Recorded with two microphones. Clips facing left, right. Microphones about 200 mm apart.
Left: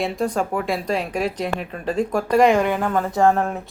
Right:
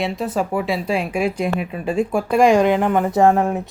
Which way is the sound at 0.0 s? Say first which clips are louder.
Even; 5° right (ahead or behind).